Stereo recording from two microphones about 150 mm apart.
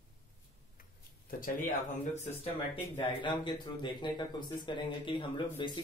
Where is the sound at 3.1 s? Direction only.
35° left (ahead or behind).